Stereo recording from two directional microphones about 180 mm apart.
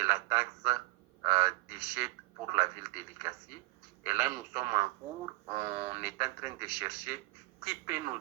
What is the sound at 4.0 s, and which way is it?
Speech, 10° right (ahead or behind).